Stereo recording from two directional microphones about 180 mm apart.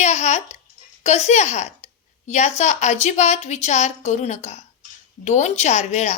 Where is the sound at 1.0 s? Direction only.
40° left (ahead or behind).